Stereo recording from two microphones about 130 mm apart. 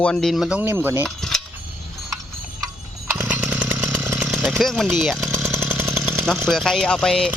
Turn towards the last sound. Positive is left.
turn(degrees=5)  # may be behind; listen again after turning